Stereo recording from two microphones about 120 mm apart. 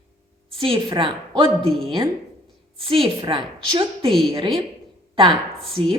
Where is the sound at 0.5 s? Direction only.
50° right (ahead or behind).